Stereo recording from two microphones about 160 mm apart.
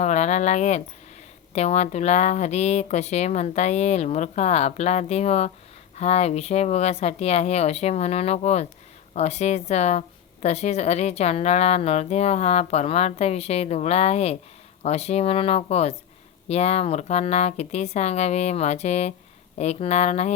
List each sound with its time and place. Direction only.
0.0 s a woman's voice: 45° left (ahead or behind)